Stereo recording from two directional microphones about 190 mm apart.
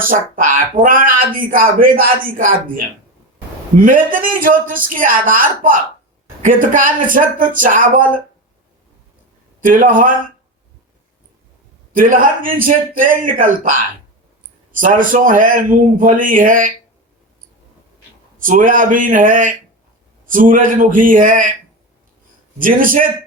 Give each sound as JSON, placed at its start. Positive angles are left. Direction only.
{"t": 0.0, "sound": "speech", "side_deg": -45}
{"t": 3.8, "sound": "speech", "side_deg": -45}
{"t": 9.6, "sound": "speech", "side_deg": -45}
{"t": 11.9, "sound": "speech", "side_deg": -45}
{"t": 18.3, "sound": "speech", "side_deg": -45}
{"t": 22.5, "sound": "speech", "side_deg": -45}